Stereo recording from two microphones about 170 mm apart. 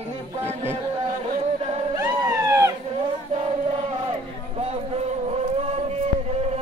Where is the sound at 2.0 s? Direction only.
20° right (ahead or behind).